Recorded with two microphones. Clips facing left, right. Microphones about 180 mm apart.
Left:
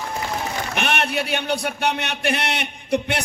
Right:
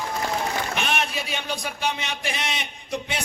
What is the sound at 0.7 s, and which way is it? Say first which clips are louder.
A man's voice: left 4 dB; 65° left (ahead or behind).